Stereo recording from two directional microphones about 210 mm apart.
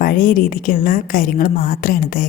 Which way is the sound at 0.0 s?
40° left (ahead or behind).